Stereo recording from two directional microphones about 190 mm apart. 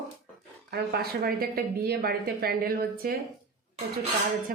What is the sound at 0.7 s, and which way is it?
A woman's voice, 55° right (ahead or behind).